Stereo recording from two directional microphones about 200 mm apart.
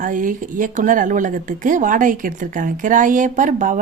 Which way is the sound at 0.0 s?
40° right (ahead or behind).